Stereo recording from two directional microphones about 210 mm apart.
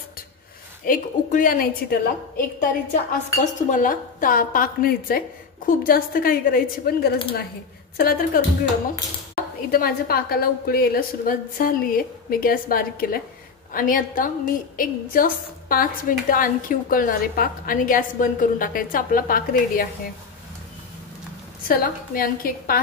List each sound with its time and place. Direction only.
0.8 s a woman's voice: 40° left (ahead or behind)
9.7 s a woman's voice: 45° left (ahead or behind)
21.6 s a woman's voice: 45° left (ahead or behind)